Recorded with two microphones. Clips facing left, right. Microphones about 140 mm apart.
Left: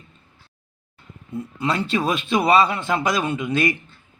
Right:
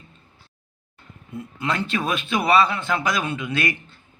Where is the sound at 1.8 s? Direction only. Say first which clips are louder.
Left 3 dB; 20° left (ahead or behind).